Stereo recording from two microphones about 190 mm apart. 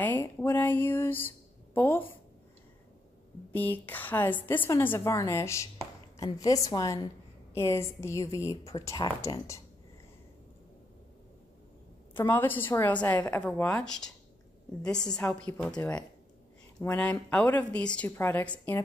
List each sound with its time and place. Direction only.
0.0 s speech: 10° left (ahead or behind)
3.5 s a woman's voice: 10° left (ahead or behind)
12.1 s a woman's voice: 10° left (ahead or behind)